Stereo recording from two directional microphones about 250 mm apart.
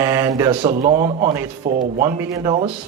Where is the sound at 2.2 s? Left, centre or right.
Centre.